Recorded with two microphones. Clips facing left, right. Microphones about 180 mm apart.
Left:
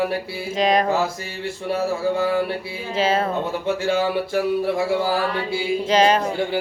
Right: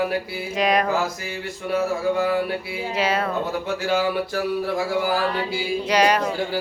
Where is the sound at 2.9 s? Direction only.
25° left (ahead or behind).